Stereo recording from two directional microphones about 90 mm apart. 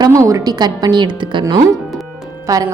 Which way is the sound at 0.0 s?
35° right (ahead or behind).